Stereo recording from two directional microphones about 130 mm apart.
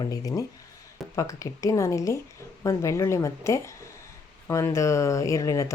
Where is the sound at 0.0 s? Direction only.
25° left (ahead or behind).